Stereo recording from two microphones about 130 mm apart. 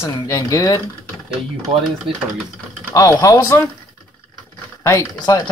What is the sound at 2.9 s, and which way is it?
Speech, 25° left (ahead or behind).